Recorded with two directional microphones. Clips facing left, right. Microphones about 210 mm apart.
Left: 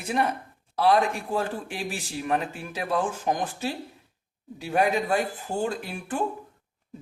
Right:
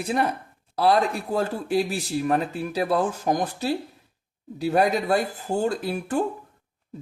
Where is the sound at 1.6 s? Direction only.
40° right (ahead or behind).